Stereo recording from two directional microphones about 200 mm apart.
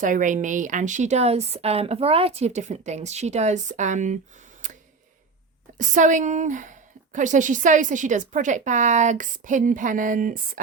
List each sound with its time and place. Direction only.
0.0 s a woman's voice: 40° right (ahead or behind)
4.6 s tick: 40° right (ahead or behind)
5.7 s a woman's voice: 40° right (ahead or behind)